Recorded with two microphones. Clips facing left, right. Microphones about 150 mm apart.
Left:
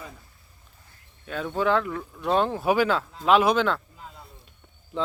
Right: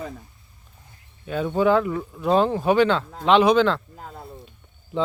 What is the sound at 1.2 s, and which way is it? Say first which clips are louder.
Speech: right 5 dB; 5° right (ahead or behind).